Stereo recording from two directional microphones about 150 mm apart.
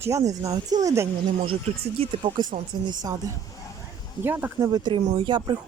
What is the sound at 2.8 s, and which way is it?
Speech, 30° right (ahead or behind).